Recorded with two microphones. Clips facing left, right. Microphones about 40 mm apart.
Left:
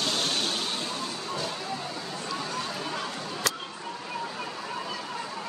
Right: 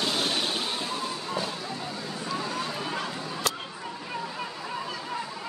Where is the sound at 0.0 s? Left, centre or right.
Centre.